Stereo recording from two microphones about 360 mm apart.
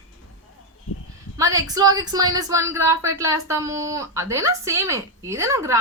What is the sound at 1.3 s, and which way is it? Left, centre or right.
Speech, centre.